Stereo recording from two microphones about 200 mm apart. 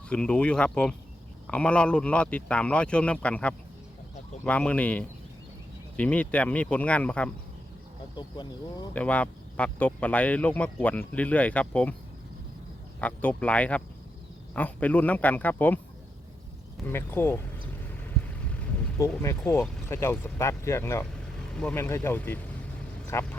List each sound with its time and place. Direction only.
0.1 s a man's voice: 5° left (ahead or behind)
8.1 s speech: 20° left (ahead or behind)
8.9 s speech: 5° left (ahead or behind)
13.0 s speech: 5° left (ahead or behind)
16.9 s speech: 10° left (ahead or behind)
19.5 s speech: 10° left (ahead or behind)